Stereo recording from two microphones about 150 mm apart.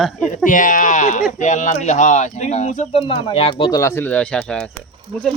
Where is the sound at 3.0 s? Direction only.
40° left (ahead or behind).